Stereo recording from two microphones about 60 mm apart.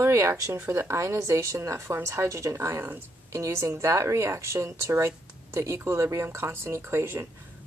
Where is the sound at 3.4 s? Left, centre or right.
Right.